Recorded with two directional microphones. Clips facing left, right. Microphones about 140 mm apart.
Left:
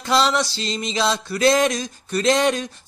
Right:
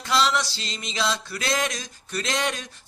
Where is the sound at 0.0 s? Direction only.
30° left (ahead or behind).